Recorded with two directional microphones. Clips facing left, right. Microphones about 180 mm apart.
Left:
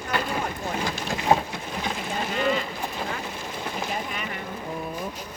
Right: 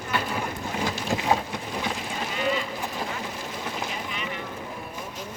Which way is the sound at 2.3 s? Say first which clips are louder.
Left 2 dB; 45° left (ahead or behind).